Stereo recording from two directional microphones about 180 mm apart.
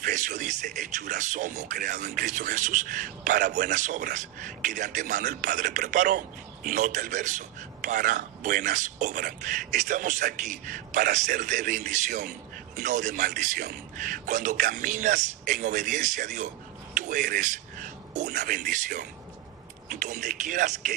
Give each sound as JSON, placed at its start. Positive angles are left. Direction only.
{"t": 0.0, "sound": "a man's voice", "side_deg": -45}